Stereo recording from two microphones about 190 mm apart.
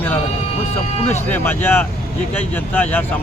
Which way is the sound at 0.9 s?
35° left (ahead or behind).